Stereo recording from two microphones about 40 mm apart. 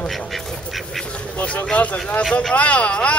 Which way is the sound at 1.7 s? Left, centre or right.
Left.